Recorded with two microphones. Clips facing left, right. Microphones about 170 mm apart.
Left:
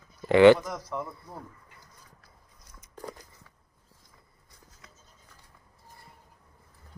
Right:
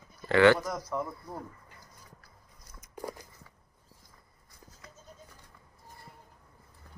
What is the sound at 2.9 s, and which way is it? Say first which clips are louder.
Walk: right 2 dB; 10° right (ahead or behind).